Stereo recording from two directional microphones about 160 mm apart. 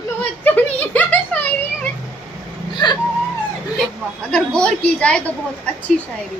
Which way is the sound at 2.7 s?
25° left (ahead or behind).